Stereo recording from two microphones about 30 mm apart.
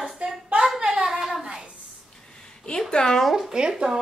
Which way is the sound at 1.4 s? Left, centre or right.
Right.